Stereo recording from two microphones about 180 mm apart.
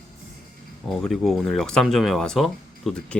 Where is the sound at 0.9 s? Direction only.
Centre (ahead or behind).